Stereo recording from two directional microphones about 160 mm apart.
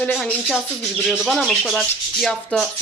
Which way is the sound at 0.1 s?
Centre (ahead or behind).